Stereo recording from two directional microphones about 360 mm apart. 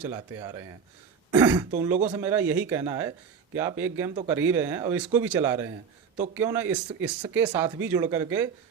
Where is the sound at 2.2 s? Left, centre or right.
Centre.